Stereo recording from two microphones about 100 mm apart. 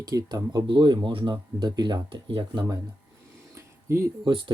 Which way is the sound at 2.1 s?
65° right (ahead or behind).